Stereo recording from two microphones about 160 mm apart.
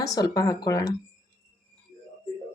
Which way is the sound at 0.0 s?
20° left (ahead or behind).